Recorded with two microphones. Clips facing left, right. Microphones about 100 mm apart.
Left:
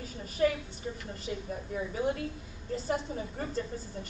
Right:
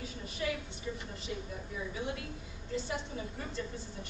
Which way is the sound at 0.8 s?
45° left (ahead or behind).